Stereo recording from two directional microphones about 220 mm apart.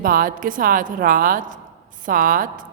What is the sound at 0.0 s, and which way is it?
A woman's voice, 40° right (ahead or behind).